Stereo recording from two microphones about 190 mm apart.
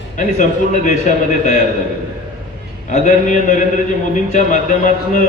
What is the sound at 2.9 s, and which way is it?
A man's voice, 40° left (ahead or behind).